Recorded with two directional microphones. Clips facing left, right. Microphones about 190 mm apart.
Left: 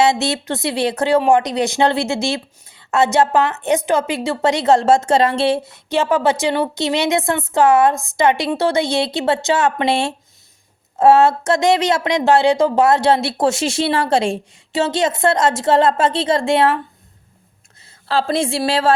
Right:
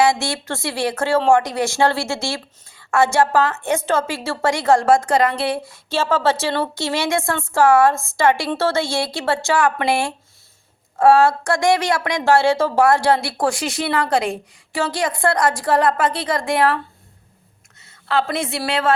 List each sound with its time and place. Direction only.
0.0 s speech: 20° left (ahead or behind)
18.1 s a woman's voice: 30° left (ahead or behind)